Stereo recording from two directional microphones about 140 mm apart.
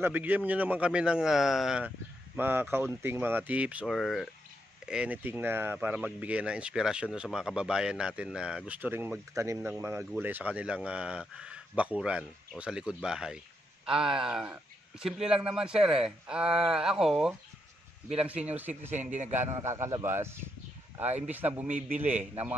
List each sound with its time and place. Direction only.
0.0 s speech: 10° right (ahead or behind)
2.3 s speech: 15° right (ahead or behind)
3.9 s speech: centre (ahead or behind)
19.1 s a man's voice: 55° right (ahead or behind)
19.6 s speech: 20° right (ahead or behind)